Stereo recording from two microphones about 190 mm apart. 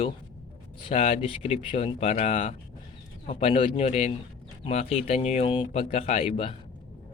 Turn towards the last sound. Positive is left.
turn(degrees=30)  # may be behind; listen again after turning